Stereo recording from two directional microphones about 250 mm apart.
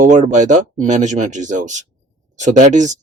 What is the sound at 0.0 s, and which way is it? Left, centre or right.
Speech, right.